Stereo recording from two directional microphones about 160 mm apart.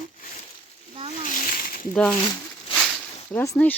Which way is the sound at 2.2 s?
25° left (ahead or behind).